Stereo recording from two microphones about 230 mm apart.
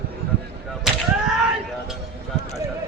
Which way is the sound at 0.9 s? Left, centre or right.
Centre.